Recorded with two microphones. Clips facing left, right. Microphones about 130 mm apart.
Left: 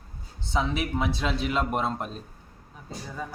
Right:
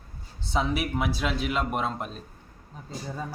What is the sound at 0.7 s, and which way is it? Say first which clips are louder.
A woman's voice: even; 10° right (ahead or behind).